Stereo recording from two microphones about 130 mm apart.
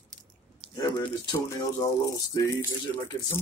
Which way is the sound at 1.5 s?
25° left (ahead or behind).